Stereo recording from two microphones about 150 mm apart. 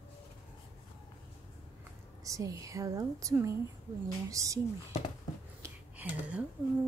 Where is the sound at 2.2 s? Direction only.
20° right (ahead or behind).